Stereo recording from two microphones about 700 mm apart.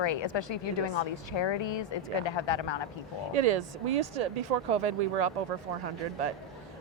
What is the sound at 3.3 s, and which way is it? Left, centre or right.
Speech, right.